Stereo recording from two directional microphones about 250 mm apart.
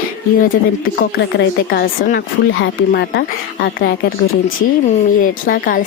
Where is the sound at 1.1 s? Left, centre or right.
Left.